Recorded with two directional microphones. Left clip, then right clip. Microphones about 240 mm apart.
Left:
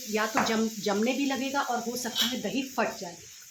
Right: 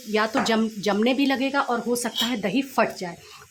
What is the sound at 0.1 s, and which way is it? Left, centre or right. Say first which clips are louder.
Speech: right 5 dB; right.